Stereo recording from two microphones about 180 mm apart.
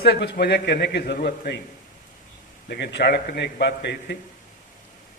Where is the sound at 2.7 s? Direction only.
70° left (ahead or behind).